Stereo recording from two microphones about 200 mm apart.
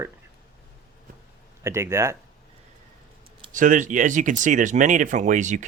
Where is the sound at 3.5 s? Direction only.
40° right (ahead or behind).